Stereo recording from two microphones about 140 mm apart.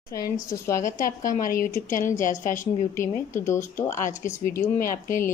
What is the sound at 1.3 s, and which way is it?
A woman's voice, 75° left (ahead or behind).